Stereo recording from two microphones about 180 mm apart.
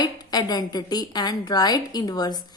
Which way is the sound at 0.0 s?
25° left (ahead or behind).